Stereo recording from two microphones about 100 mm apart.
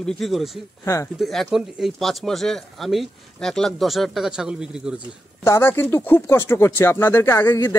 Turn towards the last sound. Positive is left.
turn(degrees=25)  # may be behind; listen again after turning